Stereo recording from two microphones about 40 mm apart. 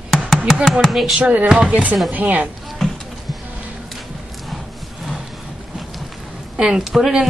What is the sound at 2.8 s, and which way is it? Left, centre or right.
Music, centre.